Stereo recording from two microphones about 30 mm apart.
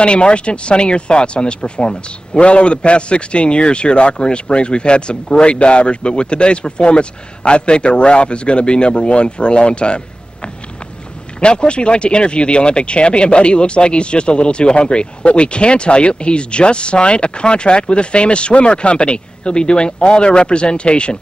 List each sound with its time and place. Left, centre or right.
0.0 s a man's voice: left
2.3 s a man's voice: left